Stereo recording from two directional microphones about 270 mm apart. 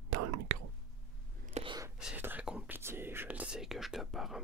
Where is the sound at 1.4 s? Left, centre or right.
Right.